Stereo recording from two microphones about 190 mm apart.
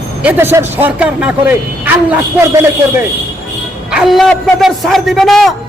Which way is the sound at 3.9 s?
Centre (ahead or behind).